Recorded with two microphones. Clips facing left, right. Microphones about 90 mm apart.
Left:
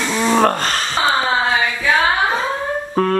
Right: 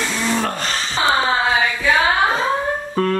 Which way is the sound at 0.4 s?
50° left (ahead or behind).